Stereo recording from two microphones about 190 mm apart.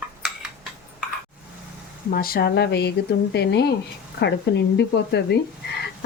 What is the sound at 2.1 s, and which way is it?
Speech, 50° left (ahead or behind).